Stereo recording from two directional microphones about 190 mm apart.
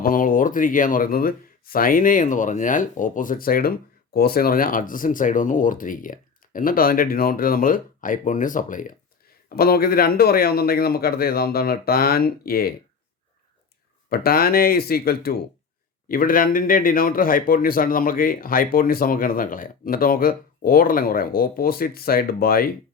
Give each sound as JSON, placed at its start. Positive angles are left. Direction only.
{"t": 0.0, "sound": "speech", "side_deg": 45}
{"t": 14.1, "sound": "speech", "side_deg": 50}